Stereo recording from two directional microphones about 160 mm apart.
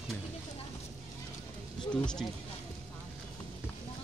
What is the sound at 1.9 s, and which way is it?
Speech, 5° left (ahead or behind).